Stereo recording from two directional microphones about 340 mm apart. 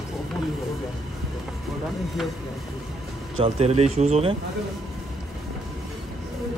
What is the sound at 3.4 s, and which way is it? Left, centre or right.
Speech, centre.